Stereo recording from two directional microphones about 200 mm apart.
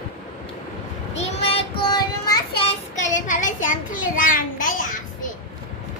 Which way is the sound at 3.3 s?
40° left (ahead or behind).